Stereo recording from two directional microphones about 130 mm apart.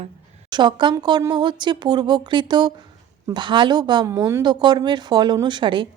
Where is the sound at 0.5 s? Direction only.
35° right (ahead or behind).